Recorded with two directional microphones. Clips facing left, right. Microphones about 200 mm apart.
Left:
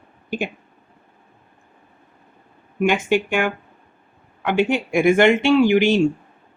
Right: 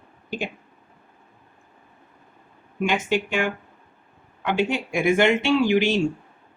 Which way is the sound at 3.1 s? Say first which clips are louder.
Left 4 dB; 55° left (ahead or behind).